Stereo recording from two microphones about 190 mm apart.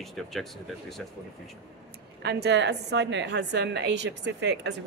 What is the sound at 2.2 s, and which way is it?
A woman's voice, 65° right (ahead or behind).